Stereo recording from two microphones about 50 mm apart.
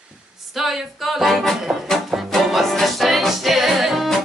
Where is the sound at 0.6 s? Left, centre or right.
Centre.